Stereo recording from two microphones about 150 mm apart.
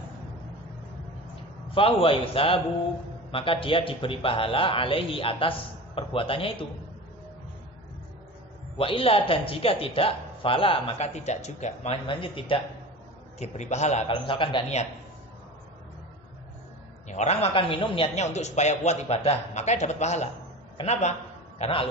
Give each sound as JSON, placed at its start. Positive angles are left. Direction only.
{"t": 1.8, "sound": "speech", "side_deg": 35}
{"t": 8.7, "sound": "speech", "side_deg": 35}
{"t": 12.1, "sound": "speech", "side_deg": 35}
{"t": 13.4, "sound": "a man's voice", "side_deg": 50}
{"t": 14.0, "sound": "speech", "side_deg": 35}
{"t": 17.1, "sound": "a man's voice", "side_deg": 50}
{"t": 20.7, "sound": "a sound", "side_deg": 45}